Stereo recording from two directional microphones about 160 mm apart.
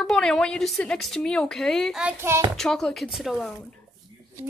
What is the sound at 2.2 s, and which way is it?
Speech, 15° right (ahead or behind).